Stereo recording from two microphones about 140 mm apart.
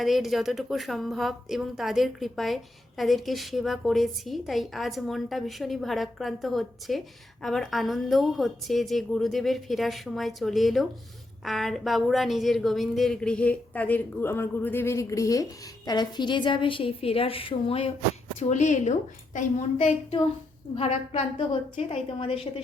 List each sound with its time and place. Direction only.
0.0 s a woman's voice: centre (ahead or behind); by 17.9 s 40° left (ahead or behind)
18.3 s a woman's voice: 55° left (ahead or behind)
20.7 s a woman's voice: 45° left (ahead or behind)